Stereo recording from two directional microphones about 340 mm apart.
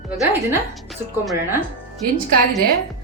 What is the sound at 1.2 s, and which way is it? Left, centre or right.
Speech, centre.